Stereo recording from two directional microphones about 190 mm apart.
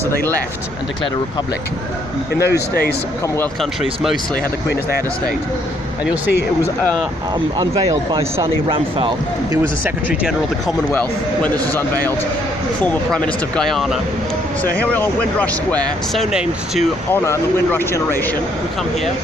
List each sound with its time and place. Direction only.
0.2 s speech: 10° left (ahead or behind)
2.4 s speech: 55° left (ahead or behind)
3.3 s speech: 10° left (ahead or behind)
6.1 s speech: 10° right (ahead or behind)
7.3 s speech: 20° right (ahead or behind)
12.8 s speech: 5° left (ahead or behind)
17.1 s speech: 10° left (ahead or behind)